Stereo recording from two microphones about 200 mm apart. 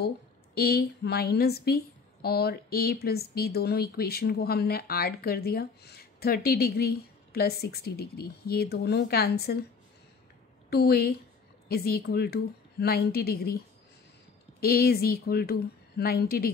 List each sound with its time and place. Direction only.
0.6 s speech: 50° left (ahead or behind)
10.7 s speech: 50° left (ahead or behind)
14.6 s speech: 50° left (ahead or behind)